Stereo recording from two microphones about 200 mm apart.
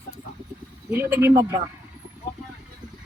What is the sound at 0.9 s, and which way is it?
Speech, 10° right (ahead or behind).